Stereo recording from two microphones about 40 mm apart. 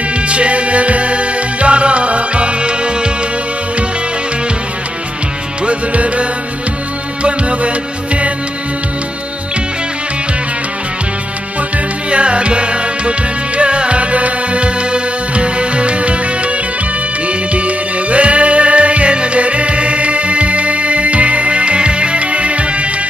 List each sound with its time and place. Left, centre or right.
0.3 s music: right
5.7 s music: right
7.2 s music: right
12.1 s music: right